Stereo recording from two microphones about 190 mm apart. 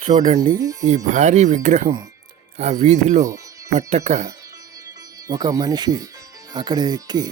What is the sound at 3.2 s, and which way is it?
Music, 15° right (ahead or behind).